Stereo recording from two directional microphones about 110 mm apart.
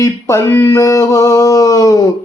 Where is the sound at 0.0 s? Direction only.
25° left (ahead or behind).